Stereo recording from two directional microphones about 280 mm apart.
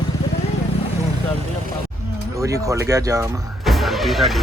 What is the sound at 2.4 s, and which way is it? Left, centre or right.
Speech, centre.